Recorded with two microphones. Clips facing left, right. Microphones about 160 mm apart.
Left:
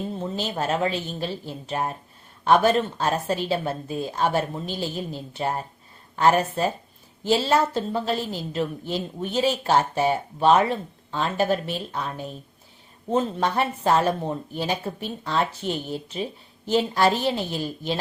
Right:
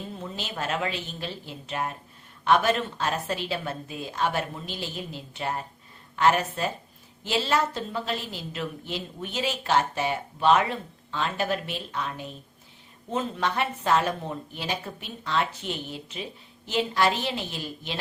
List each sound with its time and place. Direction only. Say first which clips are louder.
0.2 s a woman's voice: left 5 dB; 35° left (ahead or behind)